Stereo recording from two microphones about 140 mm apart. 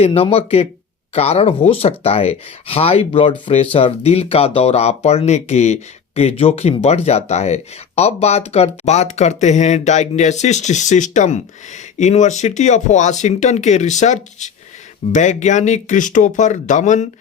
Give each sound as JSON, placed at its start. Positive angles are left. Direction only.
{"t": 0.0, "sound": "speech", "side_deg": 45}